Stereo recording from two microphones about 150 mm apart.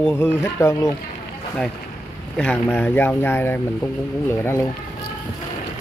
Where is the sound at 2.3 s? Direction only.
10° left (ahead or behind).